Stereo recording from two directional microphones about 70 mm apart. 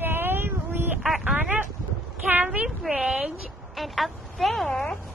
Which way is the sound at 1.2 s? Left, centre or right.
Right.